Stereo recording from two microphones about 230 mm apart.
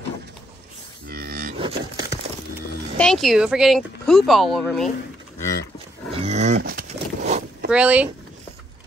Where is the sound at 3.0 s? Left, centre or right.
Centre.